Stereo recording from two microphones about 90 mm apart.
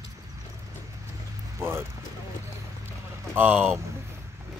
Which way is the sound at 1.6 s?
25° right (ahead or behind).